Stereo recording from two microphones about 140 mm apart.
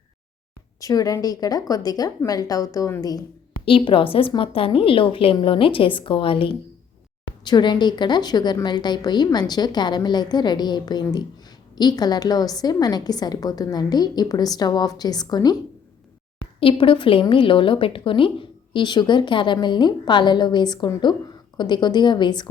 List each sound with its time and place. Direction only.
0.8 s a woman's voice: 25° left (ahead or behind)
3.7 s a woman's voice: 40° left (ahead or behind)
16.6 s a woman's voice: 40° left (ahead or behind)